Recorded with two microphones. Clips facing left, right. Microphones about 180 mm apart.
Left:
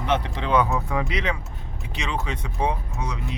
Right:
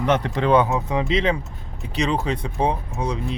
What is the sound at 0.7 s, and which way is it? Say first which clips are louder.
Speech: right 4 dB; 20° right (ahead or behind).